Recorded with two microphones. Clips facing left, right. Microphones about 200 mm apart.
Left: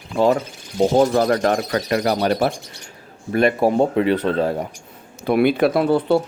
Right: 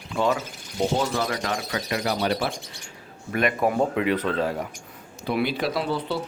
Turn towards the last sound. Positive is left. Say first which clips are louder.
# left 10 dB
turn(degrees=55)  # may be behind; listen again after turning